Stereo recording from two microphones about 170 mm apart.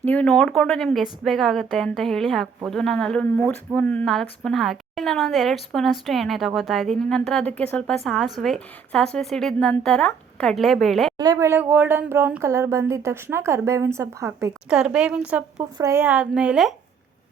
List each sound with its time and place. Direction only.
0.0 s a woman's voice: 10° left (ahead or behind)
11.2 s speech: 20° right (ahead or behind)
14.7 s a woman's voice: 5° right (ahead or behind)
15.5 s speech: 20° right (ahead or behind)